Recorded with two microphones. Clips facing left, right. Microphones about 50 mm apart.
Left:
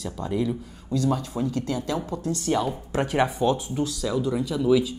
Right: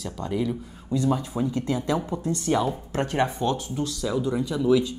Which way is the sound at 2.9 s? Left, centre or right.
Centre.